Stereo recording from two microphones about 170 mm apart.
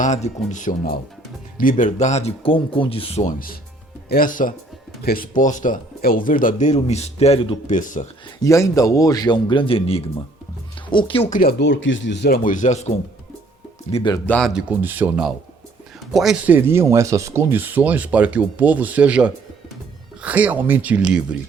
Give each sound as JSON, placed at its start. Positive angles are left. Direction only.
{"t": 0.0, "sound": "speech", "side_deg": 45}
{"t": 4.1, "sound": "speech", "side_deg": 55}
{"t": 8.4, "sound": "a man's voice", "side_deg": 20}
{"t": 11.3, "sound": "speech", "side_deg": 55}
{"t": 11.6, "sound": "speech", "side_deg": 90}
{"t": 12.4, "sound": "speech", "side_deg": 50}
{"t": 13.9, "sound": "a man's voice", "side_deg": 25}
{"t": 14.3, "sound": "speech", "side_deg": 5}
{"t": 14.5, "sound": "speech", "side_deg": -10}